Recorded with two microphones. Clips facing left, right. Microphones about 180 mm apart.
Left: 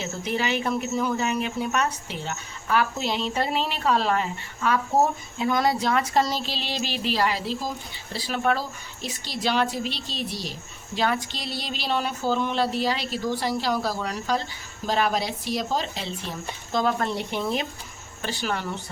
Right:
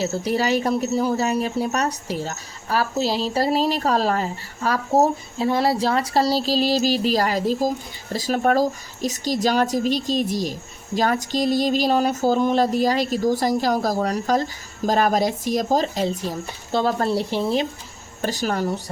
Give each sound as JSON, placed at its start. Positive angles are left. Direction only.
{"t": 0.0, "sound": "a woman's voice", "side_deg": -35}
{"t": 18.2, "sound": "speech", "side_deg": -40}